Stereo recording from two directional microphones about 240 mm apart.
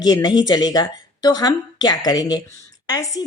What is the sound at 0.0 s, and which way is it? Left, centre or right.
A woman's voice, centre.